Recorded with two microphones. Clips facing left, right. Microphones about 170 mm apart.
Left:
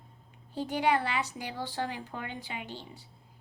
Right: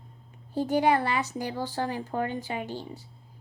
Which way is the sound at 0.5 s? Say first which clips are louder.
Right 5 dB; 45° right (ahead or behind).